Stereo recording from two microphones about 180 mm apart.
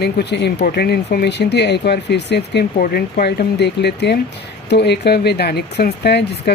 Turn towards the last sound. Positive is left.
turn(degrees=65)  # may be behind; listen again after turning